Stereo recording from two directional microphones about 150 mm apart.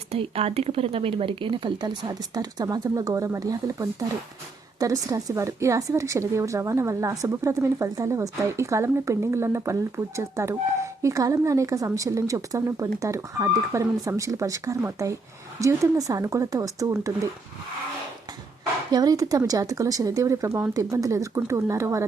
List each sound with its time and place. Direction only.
0.1 s speech: 40° right (ahead or behind); by 17.1 s 20° right (ahead or behind)
18.9 s speech: 25° right (ahead or behind)